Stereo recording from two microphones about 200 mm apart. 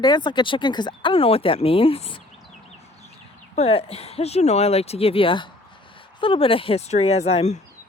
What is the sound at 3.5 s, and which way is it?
Speech, 30° left (ahead or behind).